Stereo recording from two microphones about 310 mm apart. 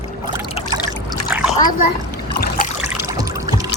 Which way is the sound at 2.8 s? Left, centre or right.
Centre.